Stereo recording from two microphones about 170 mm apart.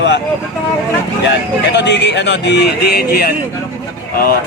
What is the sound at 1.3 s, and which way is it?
Speech, 90° left.